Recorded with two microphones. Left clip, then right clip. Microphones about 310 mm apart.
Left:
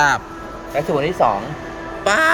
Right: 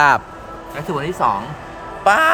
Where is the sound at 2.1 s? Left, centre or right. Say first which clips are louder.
Right 2 dB; centre.